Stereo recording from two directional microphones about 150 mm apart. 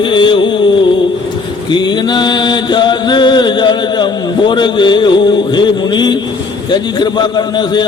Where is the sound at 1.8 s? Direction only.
30° left (ahead or behind).